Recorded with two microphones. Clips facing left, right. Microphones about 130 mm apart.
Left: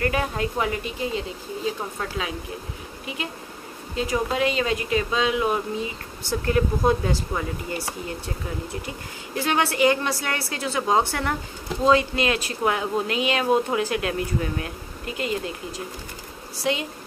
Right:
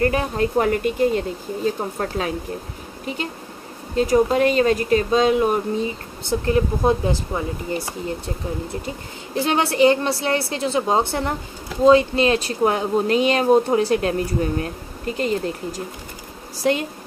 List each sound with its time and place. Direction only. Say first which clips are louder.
0.0 s speech: right 5 dB; 35° right (ahead or behind)
3.9 s speech: right 8 dB; 40° right (ahead or behind)
6.4 s a woman's voice: right 2 dB; 25° right (ahead or behind)
8.8 s a woman's voice: right 4 dB; 25° right (ahead or behind); by 16.8 s 45° right (ahead or behind)